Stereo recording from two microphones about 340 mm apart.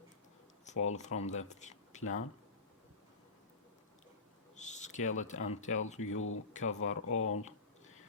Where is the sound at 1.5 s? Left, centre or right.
Left.